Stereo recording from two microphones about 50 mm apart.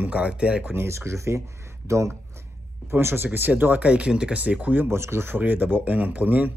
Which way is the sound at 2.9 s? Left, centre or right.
Right.